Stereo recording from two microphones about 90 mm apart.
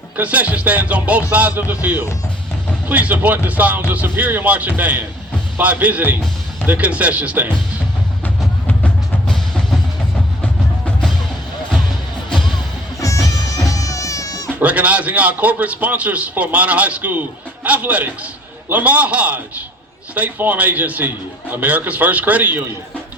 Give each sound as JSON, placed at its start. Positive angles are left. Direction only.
{"t": 0.2, "sound": "a man's voice", "side_deg": -15}
{"t": 8.6, "sound": "music", "side_deg": 15}
{"t": 12.3, "sound": "music", "side_deg": 5}
{"t": 13.0, "sound": "music", "side_deg": 35}
{"t": 14.6, "sound": "a man's voice", "side_deg": -15}